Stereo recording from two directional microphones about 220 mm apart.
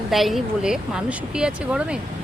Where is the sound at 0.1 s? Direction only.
Centre (ahead or behind).